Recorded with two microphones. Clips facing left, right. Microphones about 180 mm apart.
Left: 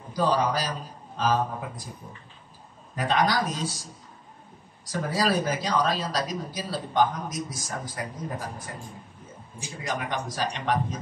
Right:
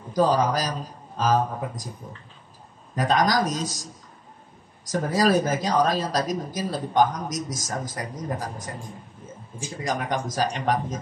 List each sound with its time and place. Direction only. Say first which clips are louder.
0.1 s speech: right 3 dB; 45° right (ahead or behind)
3.0 s speech: right 3 dB; 40° right (ahead or behind)
4.8 s speech: right 4 dB; 45° right (ahead or behind)
9.8 s speech: right 3 dB; 45° right (ahead or behind)